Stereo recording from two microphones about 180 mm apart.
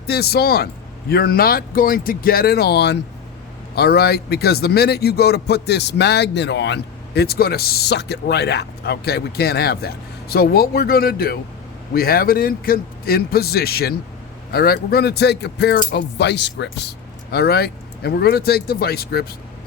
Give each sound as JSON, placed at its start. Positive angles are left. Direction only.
{"t": 0.1, "sound": "speech", "side_deg": 60}